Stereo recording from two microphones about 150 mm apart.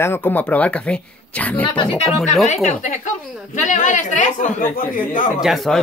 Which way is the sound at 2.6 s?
55° left (ahead or behind).